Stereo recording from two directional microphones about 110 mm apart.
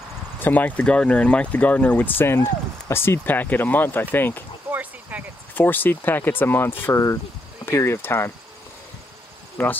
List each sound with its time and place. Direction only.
0.4 s speech: 15° left (ahead or behind)
4.6 s a sound: 15° right (ahead or behind)
5.5 s speech: 15° left (ahead or behind)
9.6 s speech: 15° left (ahead or behind)